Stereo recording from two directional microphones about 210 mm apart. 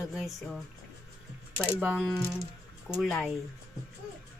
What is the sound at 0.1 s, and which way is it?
A woman's voice, centre (ahead or behind).